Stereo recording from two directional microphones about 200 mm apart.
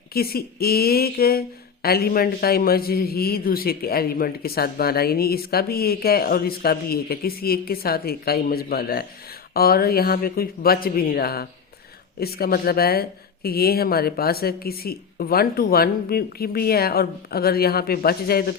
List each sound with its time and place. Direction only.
0.1 s speech: 50° left (ahead or behind)